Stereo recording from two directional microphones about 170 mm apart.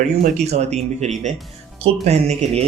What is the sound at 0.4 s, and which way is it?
Speech, 40° right (ahead or behind).